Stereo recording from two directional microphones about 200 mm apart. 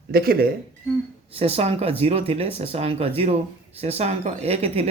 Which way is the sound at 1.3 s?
30° right (ahead or behind).